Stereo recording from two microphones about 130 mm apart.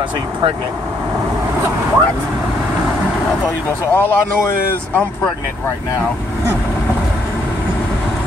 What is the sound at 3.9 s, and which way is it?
Speech, 15° left (ahead or behind).